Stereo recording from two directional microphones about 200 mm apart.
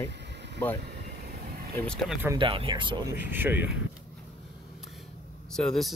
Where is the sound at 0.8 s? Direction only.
55° right (ahead or behind).